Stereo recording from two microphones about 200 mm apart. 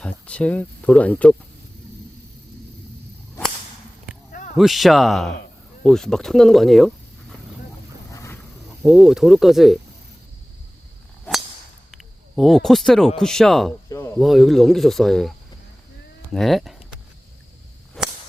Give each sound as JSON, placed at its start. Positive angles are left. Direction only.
{"t": 0.0, "sound": "speech", "side_deg": 5}
{"t": 4.3, "sound": "a sound", "side_deg": 40}
{"t": 4.5, "sound": "speech", "side_deg": 0}
{"t": 8.1, "sound": "wild animals", "side_deg": 15}
{"t": 8.8, "sound": "speech", "side_deg": 0}
{"t": 12.4, "sound": "speech", "side_deg": 0}
{"t": 13.9, "sound": "a sound", "side_deg": 15}
{"t": 14.2, "sound": "speech", "side_deg": 0}
{"t": 16.3, "sound": "speech", "side_deg": 0}
{"t": 18.0, "sound": "whip", "side_deg": 0}